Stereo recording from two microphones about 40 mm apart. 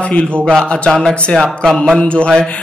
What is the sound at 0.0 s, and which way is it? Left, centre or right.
Speech, left.